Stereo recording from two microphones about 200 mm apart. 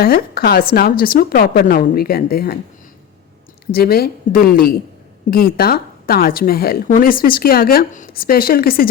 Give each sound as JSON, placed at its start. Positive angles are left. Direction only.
{"t": 0.0, "sound": "a woman's voice", "side_deg": 50}
{"t": 3.8, "sound": "a woman's voice", "side_deg": 50}